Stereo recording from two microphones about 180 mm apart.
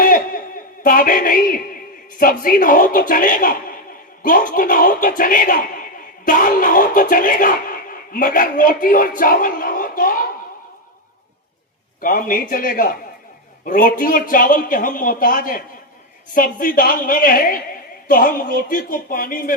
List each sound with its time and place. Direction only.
0.0 s a sound: 50° left (ahead or behind)
2.1 s a man's voice: 50° left (ahead or behind)
11.9 s a man's voice: 50° left (ahead or behind)